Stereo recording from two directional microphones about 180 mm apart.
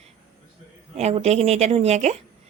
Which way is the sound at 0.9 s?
35° right (ahead or behind).